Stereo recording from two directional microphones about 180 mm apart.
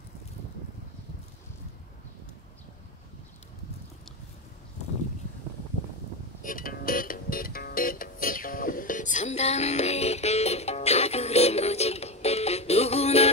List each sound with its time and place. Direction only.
6.4 s music: 50° left (ahead or behind); by 13.3 s 35° left (ahead or behind)